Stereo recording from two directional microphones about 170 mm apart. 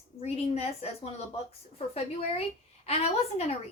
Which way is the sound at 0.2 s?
35° left (ahead or behind).